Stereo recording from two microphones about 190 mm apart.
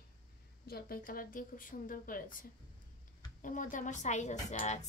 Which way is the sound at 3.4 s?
45° left (ahead or behind).